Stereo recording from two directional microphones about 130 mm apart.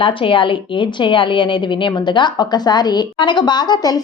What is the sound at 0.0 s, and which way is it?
A woman's voice, 40° left (ahead or behind).